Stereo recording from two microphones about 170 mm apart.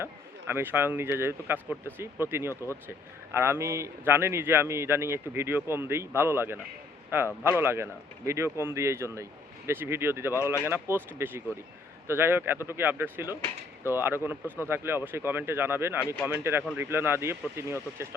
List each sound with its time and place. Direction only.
0.0 s a man's voice: 15° right (ahead or behind)
10.3 s speech: 15° left (ahead or behind)
10.7 s a man's voice: 15° right (ahead or behind)